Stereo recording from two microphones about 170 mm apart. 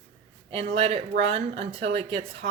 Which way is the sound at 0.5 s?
35° right (ahead or behind).